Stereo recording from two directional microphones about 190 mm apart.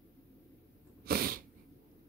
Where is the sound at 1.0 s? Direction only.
50° right (ahead or behind).